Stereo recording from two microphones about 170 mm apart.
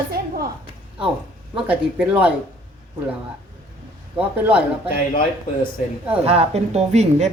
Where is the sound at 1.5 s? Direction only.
5° right (ahead or behind).